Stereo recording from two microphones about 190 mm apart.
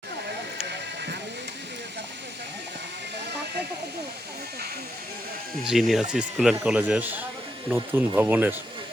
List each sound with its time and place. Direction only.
0.6 s music: 65° right (ahead or behind)
5.6 s speech: centre (ahead or behind)